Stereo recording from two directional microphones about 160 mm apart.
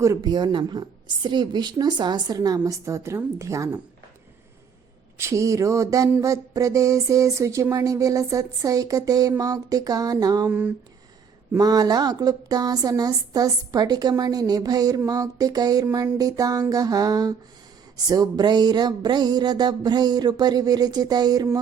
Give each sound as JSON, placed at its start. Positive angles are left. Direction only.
{"t": 0.0, "sound": "a woman's voice", "side_deg": -20}
{"t": 5.1, "sound": "a woman's voice", "side_deg": -15}
{"t": 11.5, "sound": "a woman's voice", "side_deg": -25}